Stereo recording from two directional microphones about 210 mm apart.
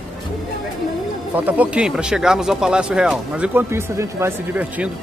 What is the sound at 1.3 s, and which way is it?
Speech, 5° right (ahead or behind).